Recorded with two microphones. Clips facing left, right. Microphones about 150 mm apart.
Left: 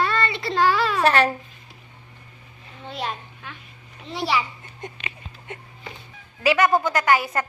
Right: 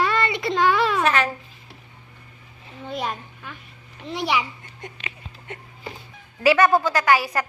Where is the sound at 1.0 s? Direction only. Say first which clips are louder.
Left 3 dB; 35° left (ahead or behind).